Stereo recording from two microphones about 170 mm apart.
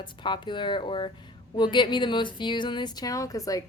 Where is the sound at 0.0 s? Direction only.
30° left (ahead or behind).